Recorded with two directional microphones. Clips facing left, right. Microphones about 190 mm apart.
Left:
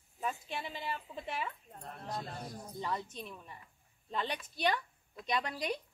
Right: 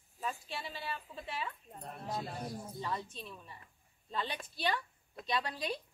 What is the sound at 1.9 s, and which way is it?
Speech, centre (ahead or behind).